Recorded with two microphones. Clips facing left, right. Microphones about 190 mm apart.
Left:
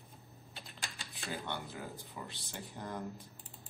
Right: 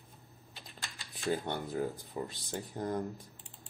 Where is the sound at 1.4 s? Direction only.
40° right (ahead or behind).